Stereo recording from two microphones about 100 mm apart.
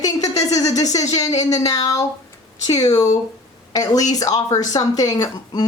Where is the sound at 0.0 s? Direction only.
35° left (ahead or behind).